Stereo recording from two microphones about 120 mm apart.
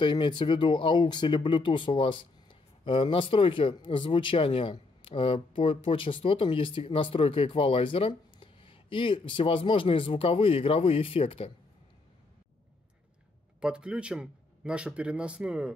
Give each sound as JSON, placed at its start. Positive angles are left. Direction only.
{"t": 0.0, "sound": "speech", "side_deg": 40}
{"t": 13.6, "sound": "speech", "side_deg": -10}